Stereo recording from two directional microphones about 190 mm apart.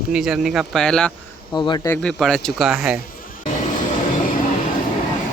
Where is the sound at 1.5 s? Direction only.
20° left (ahead or behind).